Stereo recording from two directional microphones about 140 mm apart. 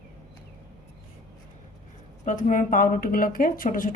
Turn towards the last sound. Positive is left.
turn(degrees=80)